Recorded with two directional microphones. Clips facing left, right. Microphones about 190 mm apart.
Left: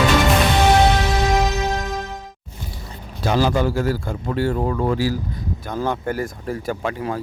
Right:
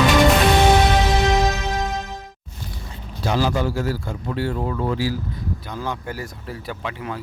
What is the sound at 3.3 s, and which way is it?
Speech, 50° left (ahead or behind).